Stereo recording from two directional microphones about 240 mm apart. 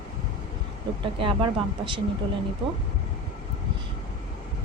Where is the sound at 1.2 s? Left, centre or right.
Right.